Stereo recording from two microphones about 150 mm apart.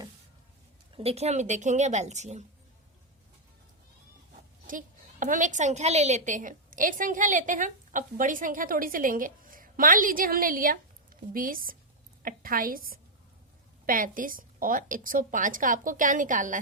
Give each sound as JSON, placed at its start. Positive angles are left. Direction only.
{"t": 0.9, "sound": "a woman's voice", "side_deg": -45}
{"t": 4.6, "sound": "a woman's voice", "side_deg": -65}